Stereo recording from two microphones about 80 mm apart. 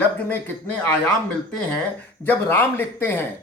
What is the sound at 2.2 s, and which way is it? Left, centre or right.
Speech, left.